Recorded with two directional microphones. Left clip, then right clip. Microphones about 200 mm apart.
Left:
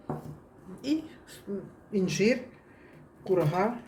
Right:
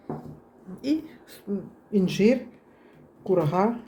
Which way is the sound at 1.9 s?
30° right (ahead or behind).